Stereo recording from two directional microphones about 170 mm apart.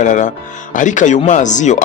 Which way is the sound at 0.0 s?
45° left (ahead or behind).